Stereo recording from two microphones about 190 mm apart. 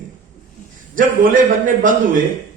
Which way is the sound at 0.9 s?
45° right (ahead or behind).